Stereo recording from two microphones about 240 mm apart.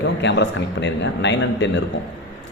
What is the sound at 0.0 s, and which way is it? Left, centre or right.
A man's voice, left.